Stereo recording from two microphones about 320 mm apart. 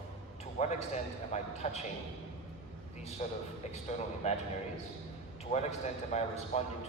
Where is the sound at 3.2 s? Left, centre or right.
Left.